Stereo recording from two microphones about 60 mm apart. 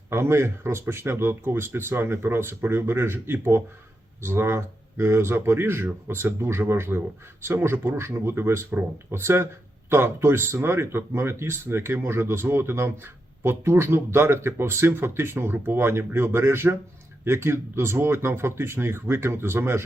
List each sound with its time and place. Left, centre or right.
0.1 s speech: right